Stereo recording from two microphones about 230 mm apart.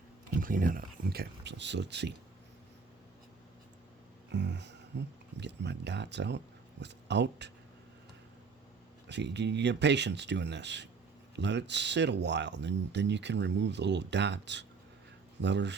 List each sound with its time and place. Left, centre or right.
0.3 s speech: right
4.3 s speech: right
9.0 s speech: right